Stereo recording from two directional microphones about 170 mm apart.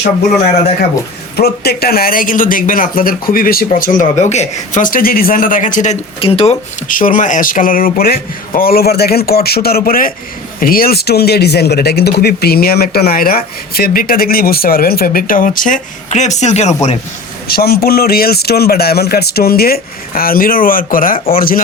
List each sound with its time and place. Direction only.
1.4 s speech: 65° left (ahead or behind); by 6.6 s 35° left (ahead or behind)
6.8 s speech: 50° left (ahead or behind)
17.5 s speech: 65° left (ahead or behind)